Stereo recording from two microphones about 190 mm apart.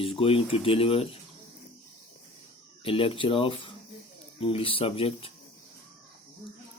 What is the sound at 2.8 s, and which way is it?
Speech, 30° left (ahead or behind).